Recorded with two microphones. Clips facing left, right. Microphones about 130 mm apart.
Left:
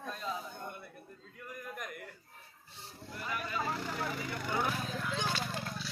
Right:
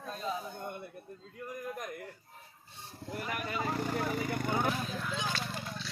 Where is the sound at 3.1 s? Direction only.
55° right (ahead or behind).